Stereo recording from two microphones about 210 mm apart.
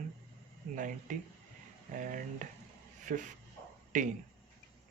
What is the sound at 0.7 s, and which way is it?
Speech, 40° right (ahead or behind).